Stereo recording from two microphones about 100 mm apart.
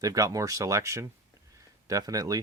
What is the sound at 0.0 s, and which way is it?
Speech, 35° right (ahead or behind).